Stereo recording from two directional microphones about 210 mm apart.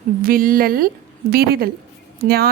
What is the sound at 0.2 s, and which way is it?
Speech, 45° right (ahead or behind).